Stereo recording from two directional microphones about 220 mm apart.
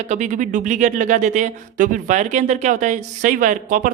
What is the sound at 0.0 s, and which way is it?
Speech, 35° right (ahead or behind).